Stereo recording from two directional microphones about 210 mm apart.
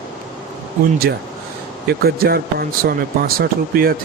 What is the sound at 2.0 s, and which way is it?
Speech, 45° right (ahead or behind).